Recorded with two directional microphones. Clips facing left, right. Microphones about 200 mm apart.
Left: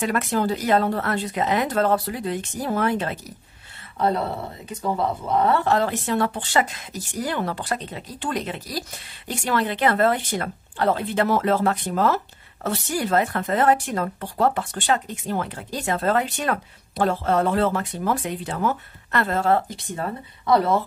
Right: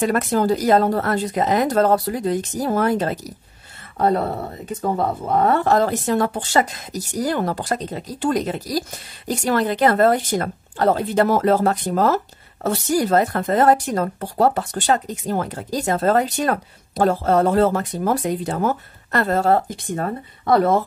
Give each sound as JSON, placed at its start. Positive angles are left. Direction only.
{"t": 0.0, "sound": "a woman's voice", "side_deg": -40}